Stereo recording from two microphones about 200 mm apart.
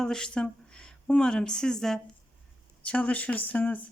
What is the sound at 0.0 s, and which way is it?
Speech, 5° left (ahead or behind).